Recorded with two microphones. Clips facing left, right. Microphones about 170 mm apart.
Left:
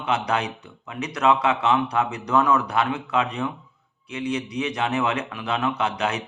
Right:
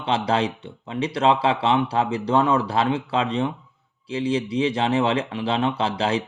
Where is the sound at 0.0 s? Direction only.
30° right (ahead or behind).